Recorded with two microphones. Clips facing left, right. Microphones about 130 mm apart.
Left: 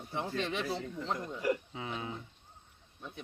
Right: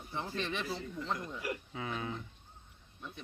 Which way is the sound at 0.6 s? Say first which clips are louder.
Left 2 dB; 30° left (ahead or behind).